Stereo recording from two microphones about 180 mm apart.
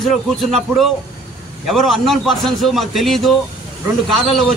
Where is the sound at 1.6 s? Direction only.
Centre (ahead or behind).